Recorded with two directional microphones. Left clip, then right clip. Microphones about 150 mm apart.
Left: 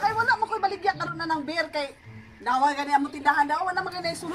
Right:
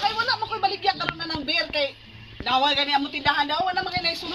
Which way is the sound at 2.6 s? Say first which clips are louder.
Left 1 dB; 25° right (ahead or behind).